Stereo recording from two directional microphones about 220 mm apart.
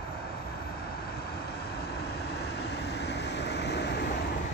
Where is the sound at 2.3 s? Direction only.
50° left (ahead or behind).